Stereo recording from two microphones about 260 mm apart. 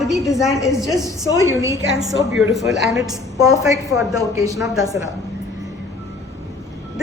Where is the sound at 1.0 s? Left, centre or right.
Centre.